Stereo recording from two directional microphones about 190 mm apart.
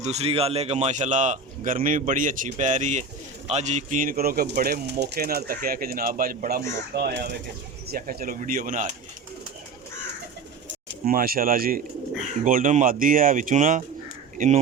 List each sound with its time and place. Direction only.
0.0 s speech: 35° right (ahead or behind)
11.0 s speech: 50° right (ahead or behind)